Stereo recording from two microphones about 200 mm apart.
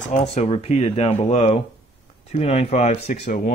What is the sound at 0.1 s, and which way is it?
Speech, 35° left (ahead or behind).